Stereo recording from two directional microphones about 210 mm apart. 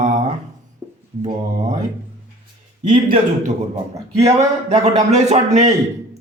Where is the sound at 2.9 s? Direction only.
40° right (ahead or behind).